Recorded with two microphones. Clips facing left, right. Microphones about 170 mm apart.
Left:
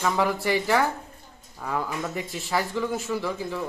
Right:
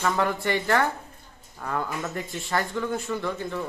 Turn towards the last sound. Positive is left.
turn(degrees=5)  # may be behind; listen again after turning